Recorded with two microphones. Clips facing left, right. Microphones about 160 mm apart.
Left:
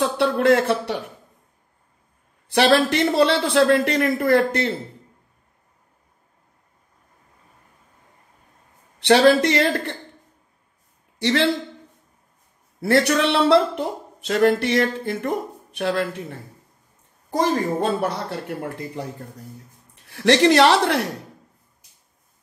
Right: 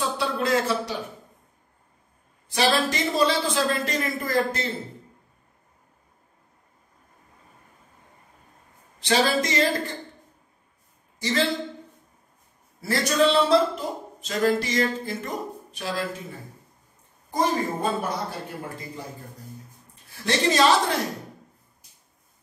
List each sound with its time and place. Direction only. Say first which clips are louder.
0.2 s speech: left 8 dB; 60° left (ahead or behind)
2.4 s speech: left 6 dB; 65° left (ahead or behind)
9.0 s speech: left 8 dB; 65° left (ahead or behind)
11.1 s speech: left 5 dB; 70° left (ahead or behind)
12.8 s speech: left 3 dB; 65° left (ahead or behind)
20.1 s speech: left 8 dB; 70° left (ahead or behind)